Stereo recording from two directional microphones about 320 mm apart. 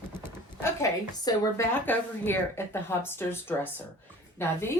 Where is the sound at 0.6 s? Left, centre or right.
Centre.